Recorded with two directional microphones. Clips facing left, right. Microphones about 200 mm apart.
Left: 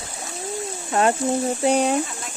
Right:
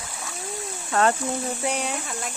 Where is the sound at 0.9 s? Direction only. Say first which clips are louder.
Left 2 dB; 20° left (ahead or behind).